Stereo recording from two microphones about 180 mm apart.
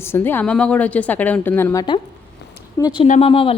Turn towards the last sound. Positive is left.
turn(degrees=30)  # may be behind; listen again after turning